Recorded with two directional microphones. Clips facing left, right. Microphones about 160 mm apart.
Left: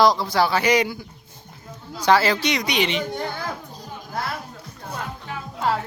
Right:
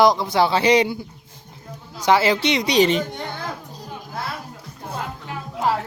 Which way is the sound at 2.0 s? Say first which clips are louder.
Right 1 dB; 20° right (ahead or behind).